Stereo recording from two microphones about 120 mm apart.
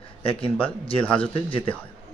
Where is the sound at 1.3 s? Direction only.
45° left (ahead or behind).